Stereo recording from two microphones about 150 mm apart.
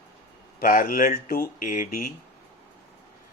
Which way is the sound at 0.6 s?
70° left (ahead or behind).